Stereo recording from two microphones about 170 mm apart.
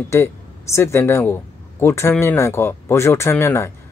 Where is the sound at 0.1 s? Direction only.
15° left (ahead or behind).